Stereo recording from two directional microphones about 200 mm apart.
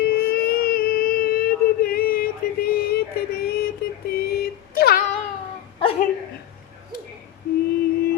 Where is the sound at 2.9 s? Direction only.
50° left (ahead or behind).